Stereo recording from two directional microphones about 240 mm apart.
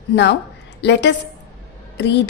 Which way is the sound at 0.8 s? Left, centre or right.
Left.